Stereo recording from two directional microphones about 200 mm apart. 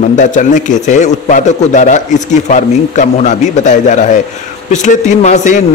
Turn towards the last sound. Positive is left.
turn(degrees=35)  # may be behind; listen again after turning